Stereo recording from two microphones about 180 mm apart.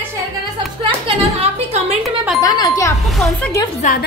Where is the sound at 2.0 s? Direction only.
Centre (ahead or behind).